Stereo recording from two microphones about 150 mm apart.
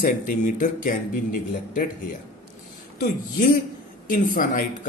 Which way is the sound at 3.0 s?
60° left (ahead or behind).